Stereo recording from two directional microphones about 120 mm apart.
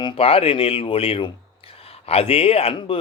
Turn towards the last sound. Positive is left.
turn(degrees=50)  # may be behind; listen again after turning